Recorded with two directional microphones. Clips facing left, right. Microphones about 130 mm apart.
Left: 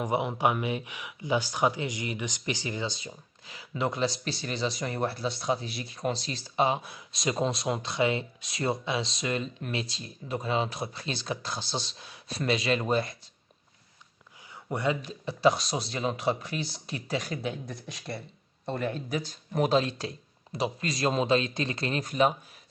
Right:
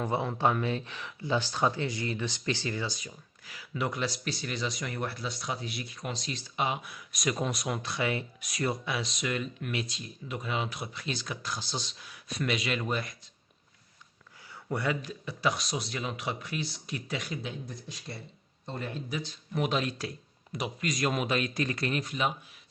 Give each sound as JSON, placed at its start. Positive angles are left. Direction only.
{"t": 0.0, "sound": "speech", "side_deg": 15}
{"t": 14.5, "sound": "speech", "side_deg": 20}
{"t": 17.4, "sound": "speech", "side_deg": 65}
{"t": 22.0, "sound": "speech", "side_deg": 40}